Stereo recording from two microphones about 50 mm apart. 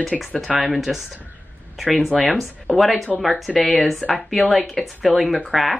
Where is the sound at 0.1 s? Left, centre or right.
Centre.